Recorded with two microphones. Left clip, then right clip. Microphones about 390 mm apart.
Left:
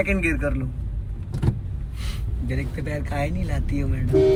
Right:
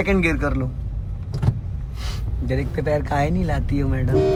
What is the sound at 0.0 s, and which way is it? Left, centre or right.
Speech, centre.